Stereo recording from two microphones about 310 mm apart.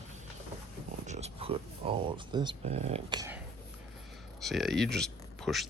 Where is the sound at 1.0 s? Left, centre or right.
Right.